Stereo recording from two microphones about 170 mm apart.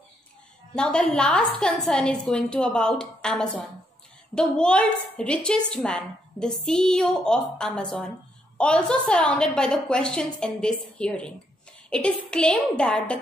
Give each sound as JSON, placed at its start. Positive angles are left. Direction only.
{"t": 0.7, "sound": "a woman's voice", "side_deg": 5}